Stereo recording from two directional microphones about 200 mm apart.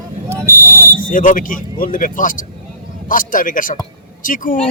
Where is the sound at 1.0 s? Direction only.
40° left (ahead or behind).